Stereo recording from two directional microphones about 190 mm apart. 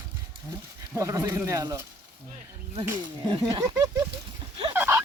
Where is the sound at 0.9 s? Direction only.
15° right (ahead or behind).